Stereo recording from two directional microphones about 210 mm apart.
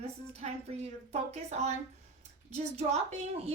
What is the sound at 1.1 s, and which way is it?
A woman's voice, 30° right (ahead or behind).